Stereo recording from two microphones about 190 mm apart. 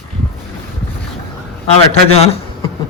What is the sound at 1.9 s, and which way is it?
Speech, 35° left (ahead or behind).